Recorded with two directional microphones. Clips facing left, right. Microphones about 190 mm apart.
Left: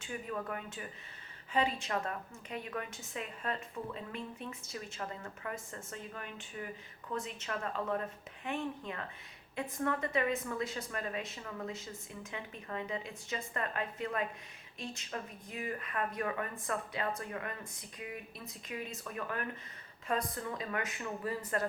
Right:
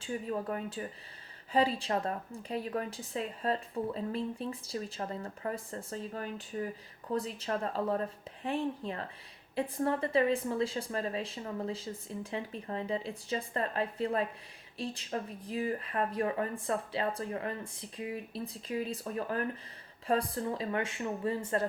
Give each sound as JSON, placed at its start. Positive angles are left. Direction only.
{"t": 0.0, "sound": "a woman's voice", "side_deg": -30}